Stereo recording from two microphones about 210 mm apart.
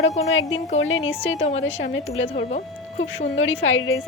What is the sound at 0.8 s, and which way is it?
Speech, 65° left (ahead or behind).